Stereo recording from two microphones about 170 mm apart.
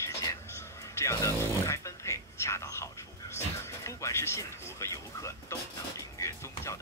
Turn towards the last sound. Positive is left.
turn(degrees=15)  # may be behind; listen again after turning